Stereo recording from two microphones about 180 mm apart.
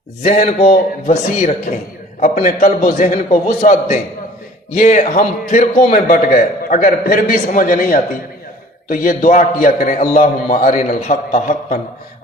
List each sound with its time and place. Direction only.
0.2 s a man's voice: 40° left (ahead or behind)